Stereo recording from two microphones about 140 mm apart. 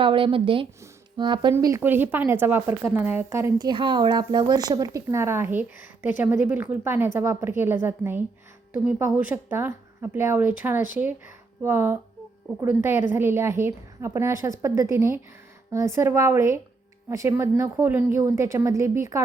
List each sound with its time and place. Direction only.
0.0 s a woman's voice: 40° right (ahead or behind)
1.5 s speech: 20° right (ahead or behind)
3.7 s speech: 35° right (ahead or behind)